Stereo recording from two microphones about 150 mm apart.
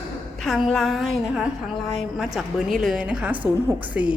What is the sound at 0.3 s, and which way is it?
A woman's voice, centre (ahead or behind).